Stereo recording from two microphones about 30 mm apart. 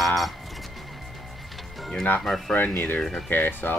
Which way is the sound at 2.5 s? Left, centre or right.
Left.